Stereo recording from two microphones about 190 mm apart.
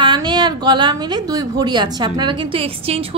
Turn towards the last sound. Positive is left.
turn(degrees=-30)  # may be behind; listen again after turning